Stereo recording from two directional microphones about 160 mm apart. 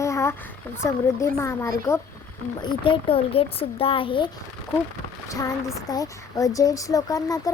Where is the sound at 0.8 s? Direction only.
20° left (ahead or behind).